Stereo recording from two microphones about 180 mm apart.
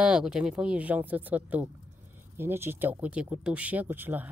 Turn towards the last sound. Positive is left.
turn(degrees=-10)  # may be behind; listen again after turning